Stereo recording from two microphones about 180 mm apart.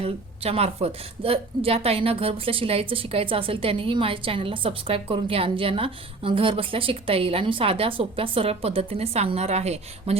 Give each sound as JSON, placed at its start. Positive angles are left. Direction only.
{"t": 0.0, "sound": "a woman's voice", "side_deg": -35}